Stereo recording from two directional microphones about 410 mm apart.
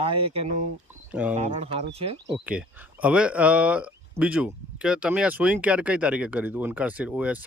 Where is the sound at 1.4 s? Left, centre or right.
Centre.